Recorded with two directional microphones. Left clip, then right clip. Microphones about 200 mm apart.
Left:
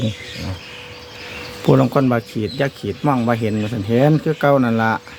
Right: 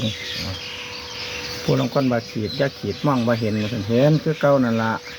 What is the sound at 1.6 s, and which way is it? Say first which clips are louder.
Speech: left 6 dB; 50° left (ahead or behind).